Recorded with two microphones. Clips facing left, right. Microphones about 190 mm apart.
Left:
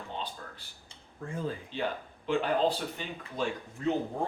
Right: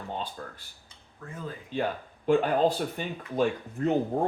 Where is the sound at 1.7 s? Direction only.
45° right (ahead or behind).